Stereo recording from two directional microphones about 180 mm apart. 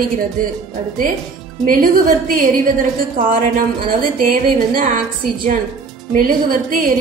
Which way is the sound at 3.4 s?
50° right (ahead or behind).